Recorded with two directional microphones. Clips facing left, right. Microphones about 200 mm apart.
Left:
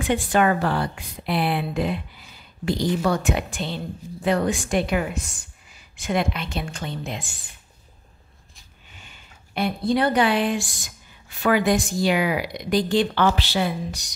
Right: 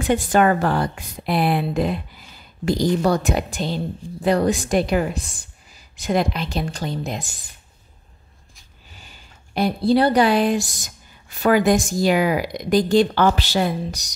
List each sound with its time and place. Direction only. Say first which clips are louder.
0.0 s speech: right 3 dB; 40° right (ahead or behind)
8.9 s speech: right 2 dB; 40° right (ahead or behind)